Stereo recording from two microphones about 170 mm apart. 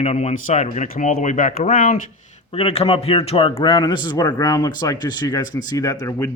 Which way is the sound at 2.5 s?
35° left (ahead or behind).